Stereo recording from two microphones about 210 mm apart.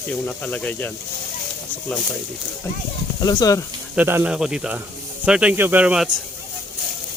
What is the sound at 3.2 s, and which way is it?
Speech, 15° left (ahead or behind).